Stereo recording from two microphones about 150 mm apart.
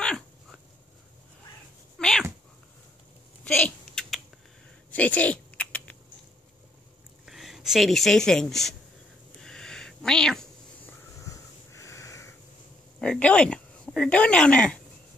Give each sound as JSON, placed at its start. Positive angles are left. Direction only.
{"t": 0.0, "sound": "dog", "side_deg": 5}
{"t": 2.0, "sound": "cat", "side_deg": 5}
{"t": 3.5, "sound": "typing", "side_deg": 10}
{"t": 7.2, "sound": "speech", "side_deg": 0}
{"t": 9.4, "sound": "a sound", "side_deg": 5}
{"t": 11.2, "sound": "wheeze", "side_deg": 20}
{"t": 13.0, "sound": "a sound", "side_deg": 5}